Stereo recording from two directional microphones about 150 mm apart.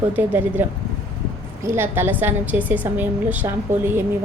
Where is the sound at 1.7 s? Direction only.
15° right (ahead or behind).